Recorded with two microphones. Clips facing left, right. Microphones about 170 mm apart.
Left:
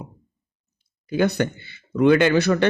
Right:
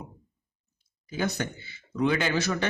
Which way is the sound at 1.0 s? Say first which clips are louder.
Left 9 dB; 65° left (ahead or behind).